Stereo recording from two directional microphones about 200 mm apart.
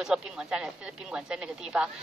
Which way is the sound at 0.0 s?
5° right (ahead or behind).